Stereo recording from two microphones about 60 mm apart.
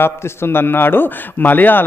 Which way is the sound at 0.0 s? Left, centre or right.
Left.